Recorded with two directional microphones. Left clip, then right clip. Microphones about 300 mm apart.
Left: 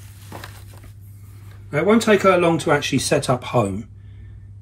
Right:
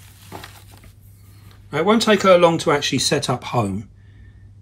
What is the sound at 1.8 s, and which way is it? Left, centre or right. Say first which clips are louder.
Speech: even; centre.